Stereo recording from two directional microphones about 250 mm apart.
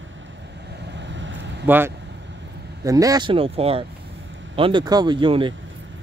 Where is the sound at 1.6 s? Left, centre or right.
Centre.